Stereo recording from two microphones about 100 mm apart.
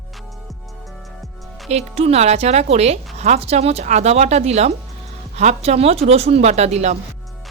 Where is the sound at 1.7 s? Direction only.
90° right.